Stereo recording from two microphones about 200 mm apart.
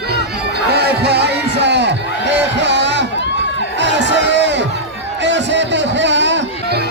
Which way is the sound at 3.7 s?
60° right (ahead or behind).